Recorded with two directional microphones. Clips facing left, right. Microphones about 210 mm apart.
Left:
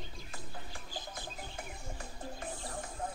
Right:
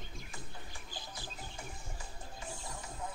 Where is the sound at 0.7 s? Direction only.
50° left (ahead or behind).